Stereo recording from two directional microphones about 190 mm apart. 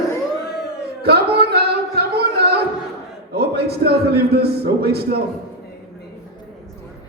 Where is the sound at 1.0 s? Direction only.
55° right (ahead or behind).